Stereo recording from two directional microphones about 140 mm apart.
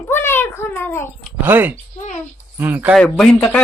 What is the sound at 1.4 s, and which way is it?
Speech, 15° right (ahead or behind).